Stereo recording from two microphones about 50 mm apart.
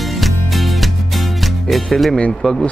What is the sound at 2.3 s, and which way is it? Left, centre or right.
Speech, centre.